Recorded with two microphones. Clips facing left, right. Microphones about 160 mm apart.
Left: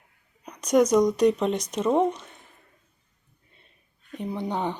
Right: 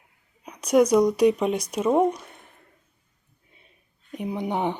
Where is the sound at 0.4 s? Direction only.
10° right (ahead or behind).